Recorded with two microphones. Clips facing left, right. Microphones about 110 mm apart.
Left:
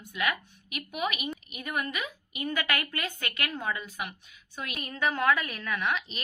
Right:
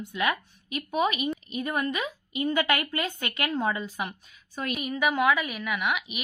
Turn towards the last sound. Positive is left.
turn(degrees=-15)  # may be behind; listen again after turning